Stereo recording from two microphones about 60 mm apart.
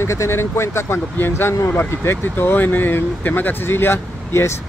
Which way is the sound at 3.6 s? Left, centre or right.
Left.